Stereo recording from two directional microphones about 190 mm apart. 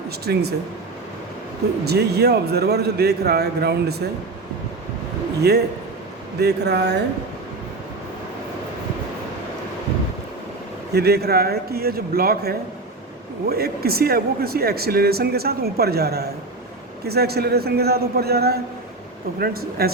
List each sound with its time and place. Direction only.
0.3 s speech: 55° right (ahead or behind)
1.8 s speech: 60° right (ahead or behind)
5.4 s speech: 60° right (ahead or behind)
10.9 s speech: 55° right (ahead or behind)